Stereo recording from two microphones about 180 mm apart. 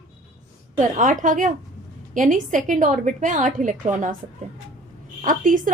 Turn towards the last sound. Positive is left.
turn(degrees=-45)  # may be behind; listen again after turning